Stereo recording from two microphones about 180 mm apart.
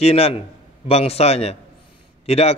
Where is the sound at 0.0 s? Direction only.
35° left (ahead or behind).